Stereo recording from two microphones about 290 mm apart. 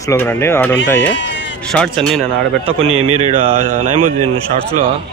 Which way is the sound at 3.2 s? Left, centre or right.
Centre.